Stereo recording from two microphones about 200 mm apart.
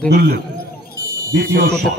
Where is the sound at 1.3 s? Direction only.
50° right (ahead or behind).